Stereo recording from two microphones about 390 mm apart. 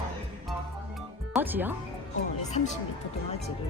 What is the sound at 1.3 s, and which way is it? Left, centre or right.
Speech, centre.